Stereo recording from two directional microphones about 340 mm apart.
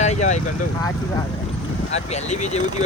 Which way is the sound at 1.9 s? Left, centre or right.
Centre.